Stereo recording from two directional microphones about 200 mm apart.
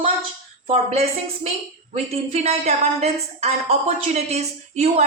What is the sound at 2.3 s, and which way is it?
A woman's voice, 30° right (ahead or behind).